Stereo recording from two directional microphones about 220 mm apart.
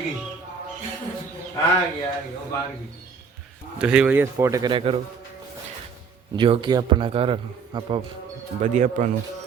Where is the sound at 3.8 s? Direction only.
5° right (ahead or behind); by 5.0 s 25° right (ahead or behind).